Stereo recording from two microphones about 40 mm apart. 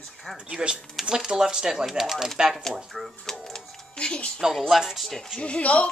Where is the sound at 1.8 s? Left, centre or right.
Centre.